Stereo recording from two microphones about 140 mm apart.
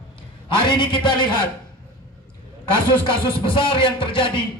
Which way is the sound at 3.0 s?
35° left (ahead or behind).